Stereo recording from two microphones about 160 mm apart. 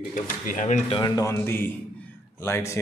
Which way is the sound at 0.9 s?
30° left (ahead or behind).